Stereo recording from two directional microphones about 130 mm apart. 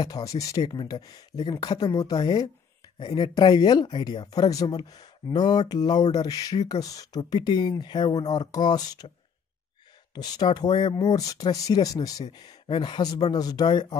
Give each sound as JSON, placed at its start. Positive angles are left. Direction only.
{"t": 0.0, "sound": "speech", "side_deg": 30}
{"t": 10.1, "sound": "speech", "side_deg": 30}